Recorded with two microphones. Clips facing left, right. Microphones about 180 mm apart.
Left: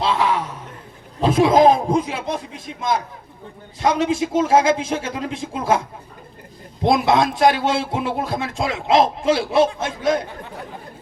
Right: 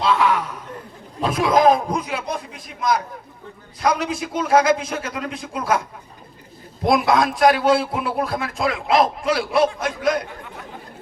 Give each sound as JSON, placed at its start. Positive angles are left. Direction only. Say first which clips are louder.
{"t": 0.0, "sound": "a sound", "louder": "right 1 dB", "side_deg": 30}
{"t": 1.2, "sound": "a man's voice", "louder": "left 3 dB", "side_deg": 25}
{"t": 6.8, "sound": "a man's voice", "louder": "left 1 dB", "side_deg": 25}